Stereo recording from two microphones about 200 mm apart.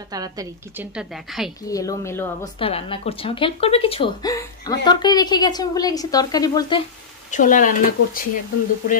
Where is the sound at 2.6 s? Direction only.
30° left (ahead or behind).